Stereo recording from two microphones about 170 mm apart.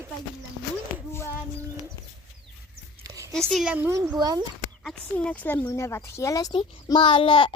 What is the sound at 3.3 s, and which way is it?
Speech, centre (ahead or behind).